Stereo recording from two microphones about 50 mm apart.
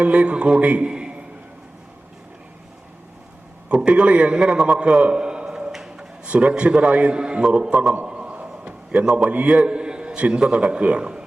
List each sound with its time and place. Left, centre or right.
0.0 s a man's voice: right
3.7 s a man's voice: centre
4.8 s a sound: right
6.2 s a man's voice: right
8.0 s a sound: right
9.3 s a man's voice: right